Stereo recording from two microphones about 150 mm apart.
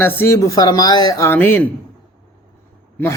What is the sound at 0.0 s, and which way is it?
Speech, 15° left (ahead or behind).